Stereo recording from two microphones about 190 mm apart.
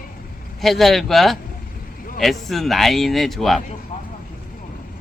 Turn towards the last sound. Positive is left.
turn(degrees=0)  # may be behind; listen again after turning